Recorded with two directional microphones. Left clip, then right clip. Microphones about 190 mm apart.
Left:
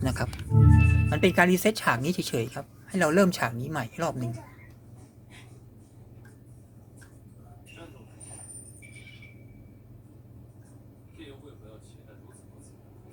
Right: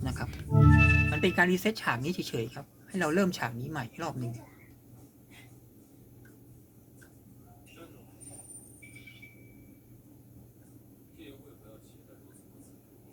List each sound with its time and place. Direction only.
0.0 s music: 35° left (ahead or behind)
0.5 s music: 50° right (ahead or behind)
1.1 s speech: 35° left (ahead or behind)